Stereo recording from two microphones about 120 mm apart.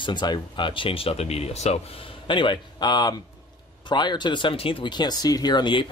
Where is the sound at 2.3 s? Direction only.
45° left (ahead or behind).